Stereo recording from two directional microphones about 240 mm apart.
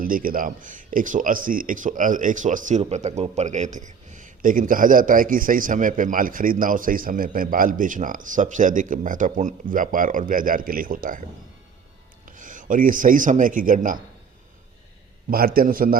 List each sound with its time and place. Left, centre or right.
0.0 s a man's voice: right
15.3 s speech: right